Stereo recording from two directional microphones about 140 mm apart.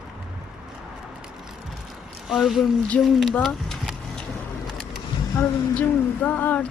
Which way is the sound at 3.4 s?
Centre (ahead or behind).